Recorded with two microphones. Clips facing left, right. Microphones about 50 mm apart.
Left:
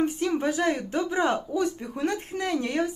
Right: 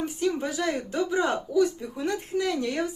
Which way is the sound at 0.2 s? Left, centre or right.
Left.